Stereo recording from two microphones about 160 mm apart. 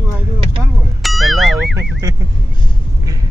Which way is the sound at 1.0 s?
Centre (ahead or behind).